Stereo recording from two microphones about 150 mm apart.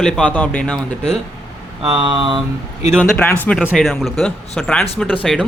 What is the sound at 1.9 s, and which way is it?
Speech, 30° right (ahead or behind).